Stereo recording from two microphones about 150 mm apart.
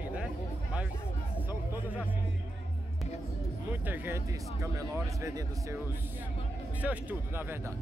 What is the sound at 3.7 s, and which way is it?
Speech, 15° right (ahead or behind).